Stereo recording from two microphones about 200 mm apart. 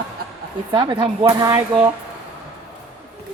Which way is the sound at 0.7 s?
25° right (ahead or behind).